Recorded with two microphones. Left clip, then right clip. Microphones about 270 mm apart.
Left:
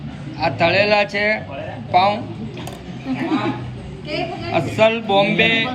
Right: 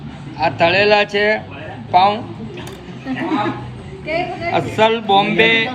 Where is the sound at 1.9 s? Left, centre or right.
Right.